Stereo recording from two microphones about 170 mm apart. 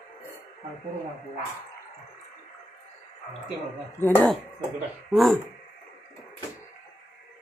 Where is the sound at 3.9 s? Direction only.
15° left (ahead or behind).